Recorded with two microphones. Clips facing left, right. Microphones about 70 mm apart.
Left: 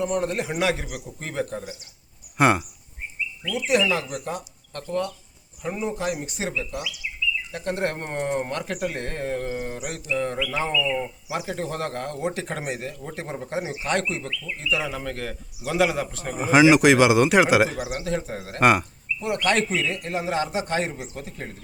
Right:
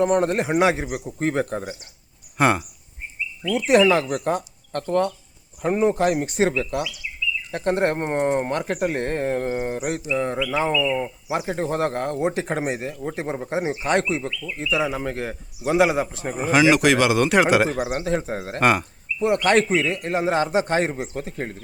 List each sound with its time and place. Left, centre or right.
0.0 s speech: right
2.4 s speech: centre
3.7 s speech: right
7.5 s speech: right
16.4 s speech: centre
17.7 s speech: right
18.6 s speech: centre
19.2 s speech: right